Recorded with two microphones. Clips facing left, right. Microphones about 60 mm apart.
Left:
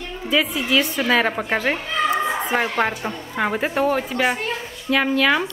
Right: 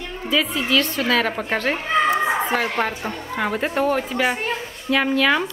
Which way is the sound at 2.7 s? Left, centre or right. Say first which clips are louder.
Left 1 dB; centre.